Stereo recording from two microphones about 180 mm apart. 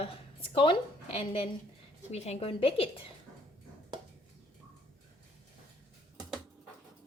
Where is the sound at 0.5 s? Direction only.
30° left (ahead or behind).